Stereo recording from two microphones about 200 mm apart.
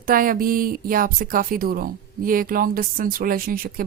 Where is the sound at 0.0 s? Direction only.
45° right (ahead or behind).